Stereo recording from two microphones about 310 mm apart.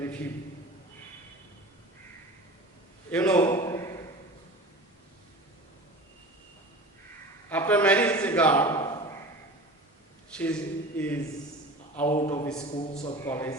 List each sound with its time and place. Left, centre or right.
3.1 s a man's voice: centre
7.5 s a sound: centre
10.3 s speech: centre
12.0 s a man's voice: left
12.3 s a man's voice: centre